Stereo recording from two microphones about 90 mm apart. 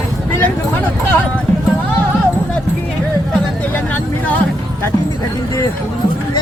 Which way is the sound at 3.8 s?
15° left (ahead or behind).